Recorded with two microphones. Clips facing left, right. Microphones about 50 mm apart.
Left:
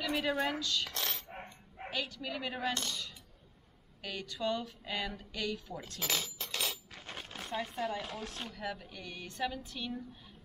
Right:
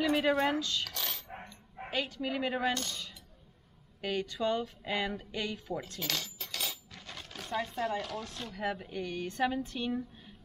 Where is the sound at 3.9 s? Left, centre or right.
Right.